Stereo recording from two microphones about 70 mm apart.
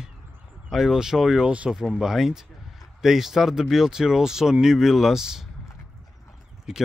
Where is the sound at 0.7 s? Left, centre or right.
Centre.